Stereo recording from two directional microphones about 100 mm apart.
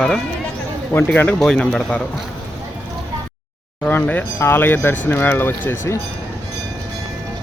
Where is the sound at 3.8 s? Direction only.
15° left (ahead or behind).